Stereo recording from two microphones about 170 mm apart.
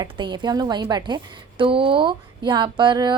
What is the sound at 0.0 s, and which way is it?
A woman's voice, 25° right (ahead or behind).